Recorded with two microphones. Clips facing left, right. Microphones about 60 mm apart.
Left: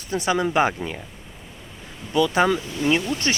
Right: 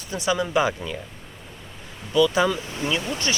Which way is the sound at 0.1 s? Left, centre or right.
Left.